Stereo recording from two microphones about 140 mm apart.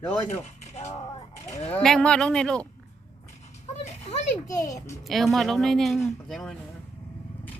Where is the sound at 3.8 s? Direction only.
55° left (ahead or behind).